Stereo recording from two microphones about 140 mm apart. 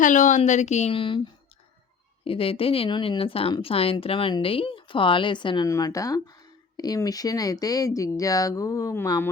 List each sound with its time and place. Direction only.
0.0 s a woman's voice: 65° left (ahead or behind)
0.9 s speech: 35° left (ahead or behind)
5.6 s speech: 25° left (ahead or behind)